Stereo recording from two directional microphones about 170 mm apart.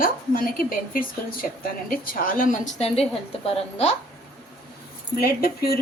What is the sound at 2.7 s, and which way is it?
A woman's voice, 35° left (ahead or behind).